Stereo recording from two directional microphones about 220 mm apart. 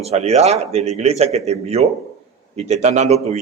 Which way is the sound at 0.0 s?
30° right (ahead or behind).